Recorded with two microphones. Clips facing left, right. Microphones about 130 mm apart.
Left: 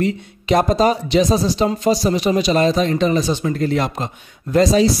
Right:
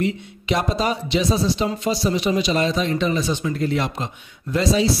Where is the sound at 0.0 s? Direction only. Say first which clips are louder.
Left 3 dB; 40° left (ahead or behind).